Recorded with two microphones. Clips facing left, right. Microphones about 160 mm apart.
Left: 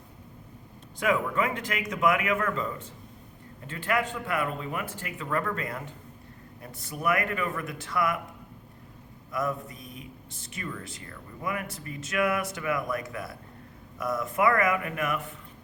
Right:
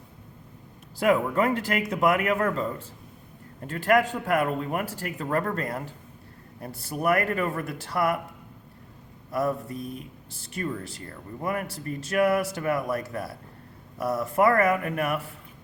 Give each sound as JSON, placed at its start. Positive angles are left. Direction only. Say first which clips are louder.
{"t": 0.9, "sound": "speech", "louder": "right 4 dB", "side_deg": -40}
{"t": 9.3, "sound": "speech", "louder": "right 4 dB", "side_deg": -35}